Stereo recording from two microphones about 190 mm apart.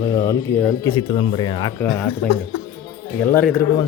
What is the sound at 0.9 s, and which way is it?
Speech, 25° left (ahead or behind).